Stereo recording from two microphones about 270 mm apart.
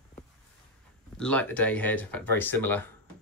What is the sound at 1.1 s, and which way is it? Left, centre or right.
Speech, centre.